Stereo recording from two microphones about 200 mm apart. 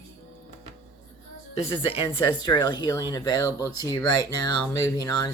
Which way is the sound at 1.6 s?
25° left (ahead or behind).